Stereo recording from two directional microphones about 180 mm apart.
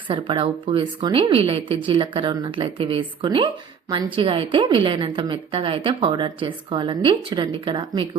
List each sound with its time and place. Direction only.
0.1 s a woman's voice: 30° right (ahead or behind)